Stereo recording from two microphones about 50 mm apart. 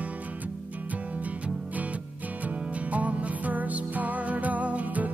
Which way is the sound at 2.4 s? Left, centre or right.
Right.